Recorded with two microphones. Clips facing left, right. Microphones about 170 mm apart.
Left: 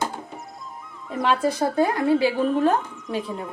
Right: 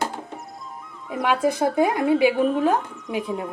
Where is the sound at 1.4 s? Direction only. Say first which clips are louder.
Right 4 dB; 15° right (ahead or behind).